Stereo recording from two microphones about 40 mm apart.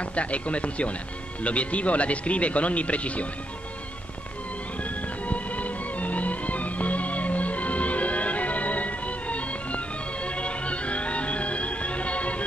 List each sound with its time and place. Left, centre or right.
0.0 s speech: left
5.2 s music: left